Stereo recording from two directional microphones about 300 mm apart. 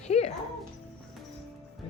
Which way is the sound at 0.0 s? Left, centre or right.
Left.